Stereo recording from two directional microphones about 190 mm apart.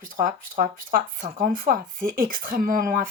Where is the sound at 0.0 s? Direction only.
45° right (ahead or behind).